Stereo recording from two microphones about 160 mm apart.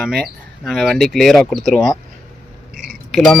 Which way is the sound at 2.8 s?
Centre (ahead or behind).